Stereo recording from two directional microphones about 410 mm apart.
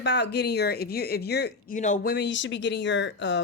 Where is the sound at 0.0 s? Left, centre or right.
Left.